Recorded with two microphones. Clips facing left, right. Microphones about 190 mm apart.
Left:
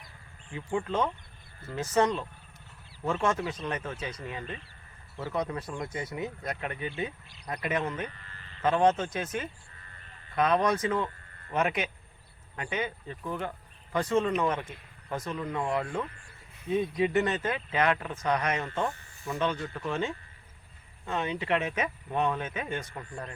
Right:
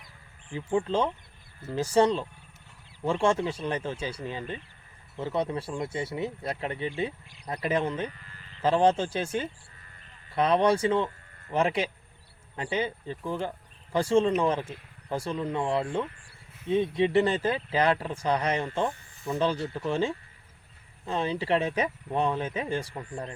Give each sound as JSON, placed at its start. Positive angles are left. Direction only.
{"t": 0.5, "sound": "speech", "side_deg": -30}
{"t": 18.9, "sound": "snake", "side_deg": -15}
{"t": 19.4, "sound": "speech", "side_deg": -30}